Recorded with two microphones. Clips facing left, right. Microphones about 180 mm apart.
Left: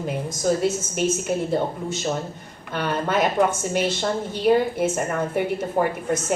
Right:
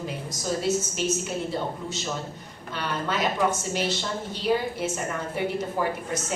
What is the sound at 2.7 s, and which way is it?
A woman's voice, 55° left (ahead or behind).